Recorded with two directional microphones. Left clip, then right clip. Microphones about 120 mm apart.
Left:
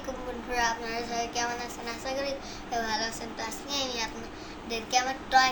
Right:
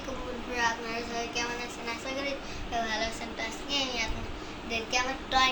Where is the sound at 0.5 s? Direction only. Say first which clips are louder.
Left 1 dB; 15° left (ahead or behind).